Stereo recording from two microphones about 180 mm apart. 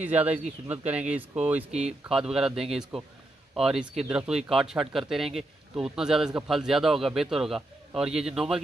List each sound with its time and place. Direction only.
0.0 s speech: 10° right (ahead or behind)